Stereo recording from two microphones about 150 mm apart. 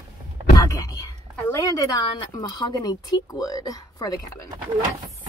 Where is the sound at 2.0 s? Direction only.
30° left (ahead or behind).